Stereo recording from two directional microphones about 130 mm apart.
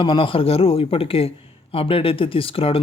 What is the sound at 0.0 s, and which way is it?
Speech, 40° left (ahead or behind).